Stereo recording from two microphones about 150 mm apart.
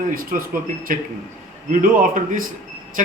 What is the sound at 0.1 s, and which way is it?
Speech, 70° right (ahead or behind).